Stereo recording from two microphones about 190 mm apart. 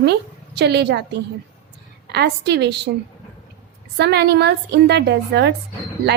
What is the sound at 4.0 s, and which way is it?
A woman's voice, 60° right (ahead or behind).